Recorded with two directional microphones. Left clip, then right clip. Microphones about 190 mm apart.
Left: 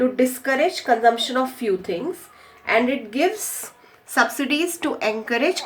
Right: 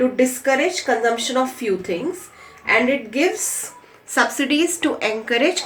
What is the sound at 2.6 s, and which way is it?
Speech, 45° left (ahead or behind).